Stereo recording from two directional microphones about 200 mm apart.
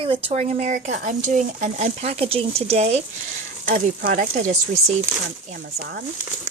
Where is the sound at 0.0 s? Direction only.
25° right (ahead or behind).